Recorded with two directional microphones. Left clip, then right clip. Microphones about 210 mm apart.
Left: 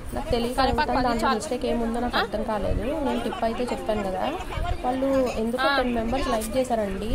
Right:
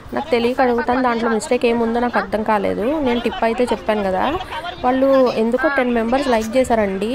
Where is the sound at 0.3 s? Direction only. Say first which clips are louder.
Right 7 dB; 30° right (ahead or behind).